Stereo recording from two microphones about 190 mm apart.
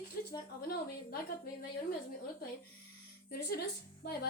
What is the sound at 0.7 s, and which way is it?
Speech, 55° left (ahead or behind).